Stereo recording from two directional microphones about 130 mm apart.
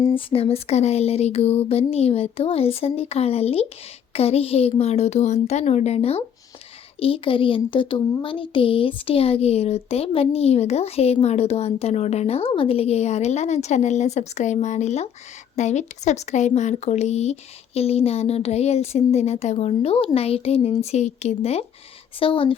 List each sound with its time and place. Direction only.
0.1 s speech: 45° left (ahead or behind)
22.2 s speech: 40° left (ahead or behind)